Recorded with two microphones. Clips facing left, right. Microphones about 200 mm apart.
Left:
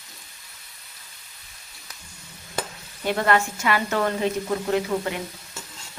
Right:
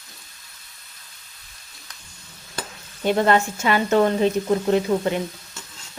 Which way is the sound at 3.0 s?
25° right (ahead or behind).